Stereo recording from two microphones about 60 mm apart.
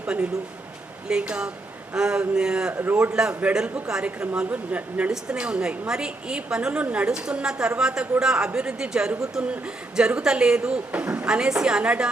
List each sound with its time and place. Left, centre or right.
0.0 s a man's voice: centre
2.7 s speech: right
3.0 s a man's voice: centre
11.3 s a man's voice: centre